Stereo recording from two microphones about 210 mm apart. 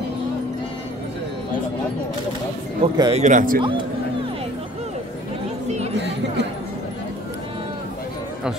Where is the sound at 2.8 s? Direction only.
25° right (ahead or behind).